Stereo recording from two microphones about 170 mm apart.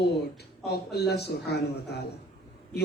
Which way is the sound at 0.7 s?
75° left (ahead or behind).